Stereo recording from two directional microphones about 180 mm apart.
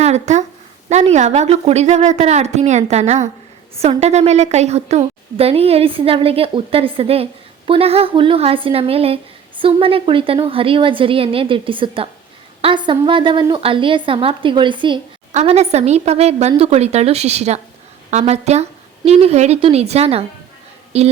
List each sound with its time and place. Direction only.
0.0 s a sound: 40° right (ahead or behind)
0.9 s a woman's voice: 40° right (ahead or behind)
15.3 s a woman's voice: 40° right (ahead or behind)